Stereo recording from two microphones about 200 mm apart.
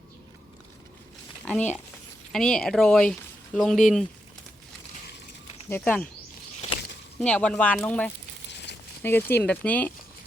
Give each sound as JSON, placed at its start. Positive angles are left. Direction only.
{"t": 2.3, "sound": "speech", "side_deg": 0}
{"t": 5.6, "sound": "speech", "side_deg": 10}
{"t": 7.2, "sound": "speech", "side_deg": 5}
{"t": 8.4, "sound": "a sound", "side_deg": 60}
{"t": 9.0, "sound": "speech", "side_deg": 10}